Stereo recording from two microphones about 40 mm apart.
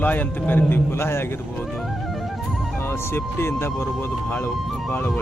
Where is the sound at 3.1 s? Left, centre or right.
Left.